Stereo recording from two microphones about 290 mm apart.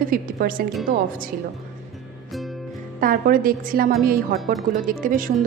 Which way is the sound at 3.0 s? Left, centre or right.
Right.